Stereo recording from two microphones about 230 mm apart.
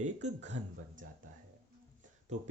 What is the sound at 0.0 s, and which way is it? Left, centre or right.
Speech, right.